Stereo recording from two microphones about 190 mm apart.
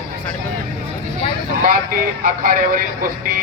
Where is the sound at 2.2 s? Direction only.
45° right (ahead or behind).